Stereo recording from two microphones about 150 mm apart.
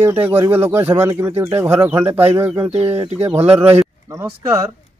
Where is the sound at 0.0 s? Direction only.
15° right (ahead or behind).